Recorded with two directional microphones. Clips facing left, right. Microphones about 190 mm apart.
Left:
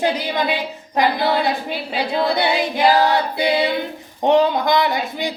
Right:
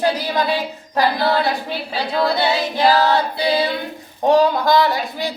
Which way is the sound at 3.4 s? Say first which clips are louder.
Left 1 dB; 20° left (ahead or behind).